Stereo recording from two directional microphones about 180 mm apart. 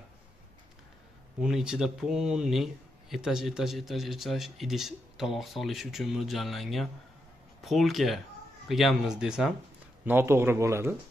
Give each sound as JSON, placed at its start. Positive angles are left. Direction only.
{"t": 1.4, "sound": "speech", "side_deg": -5}